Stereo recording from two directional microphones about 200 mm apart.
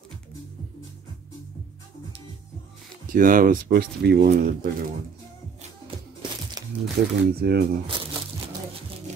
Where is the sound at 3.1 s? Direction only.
45° right (ahead or behind).